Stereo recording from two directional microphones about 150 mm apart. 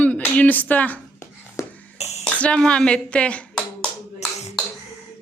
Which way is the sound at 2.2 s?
5° left (ahead or behind).